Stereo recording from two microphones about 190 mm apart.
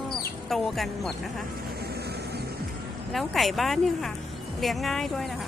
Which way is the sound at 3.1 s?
Centre (ahead or behind).